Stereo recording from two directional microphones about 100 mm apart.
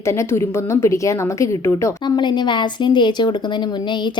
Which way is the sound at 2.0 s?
50° left (ahead or behind).